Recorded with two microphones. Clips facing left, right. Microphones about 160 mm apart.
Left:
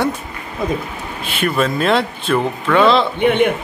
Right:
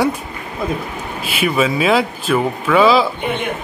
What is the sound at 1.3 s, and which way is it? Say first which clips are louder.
A man's voice: right 1 dB; centre (ahead or behind).